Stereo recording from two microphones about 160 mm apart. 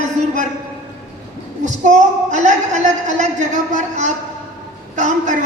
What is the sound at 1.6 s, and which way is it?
A woman's voice, 50° right (ahead or behind).